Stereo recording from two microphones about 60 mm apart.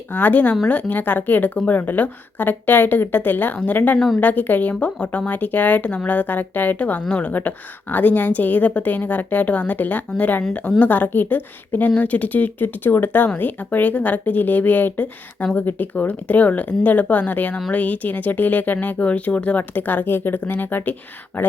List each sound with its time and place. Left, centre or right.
0.1 s a woman's voice: left
3.9 s a woman's voice: centre
4.2 s a woman's voice: left